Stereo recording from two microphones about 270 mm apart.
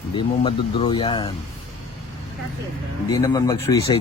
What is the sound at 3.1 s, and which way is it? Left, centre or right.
Speech, centre.